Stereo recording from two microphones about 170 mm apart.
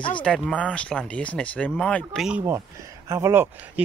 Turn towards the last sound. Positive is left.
turn(degrees=-15)  # may be behind; listen again after turning